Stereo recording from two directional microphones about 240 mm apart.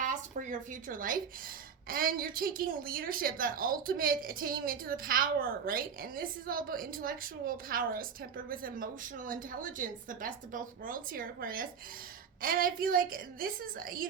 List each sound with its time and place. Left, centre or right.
0.0 s a woman's voice: right